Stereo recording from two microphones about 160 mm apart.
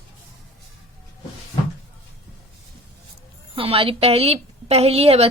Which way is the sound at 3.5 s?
35° right (ahead or behind).